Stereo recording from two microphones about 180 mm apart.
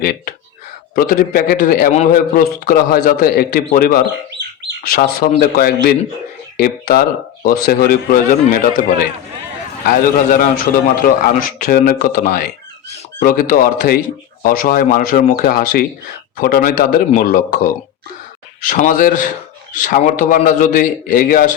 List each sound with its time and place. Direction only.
0.0 s a man's voice: 60° left (ahead or behind)